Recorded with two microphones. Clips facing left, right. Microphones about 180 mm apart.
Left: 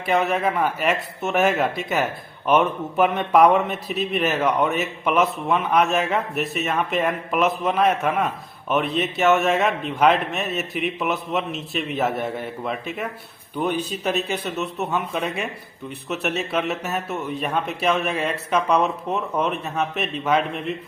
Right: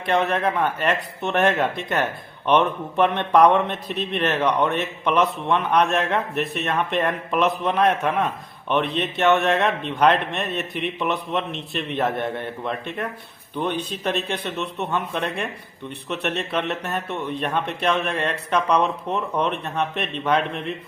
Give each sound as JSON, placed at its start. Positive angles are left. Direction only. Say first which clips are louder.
{"t": 0.0, "sound": "a man's voice", "louder": "even", "side_deg": 5}